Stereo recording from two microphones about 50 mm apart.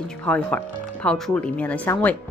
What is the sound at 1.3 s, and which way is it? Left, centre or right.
Speech, left.